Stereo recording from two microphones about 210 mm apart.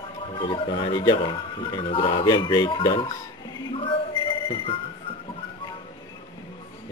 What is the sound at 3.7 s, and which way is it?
Music, 25° left (ahead or behind).